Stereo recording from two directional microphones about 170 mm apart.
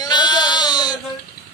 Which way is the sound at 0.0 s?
25° left (ahead or behind).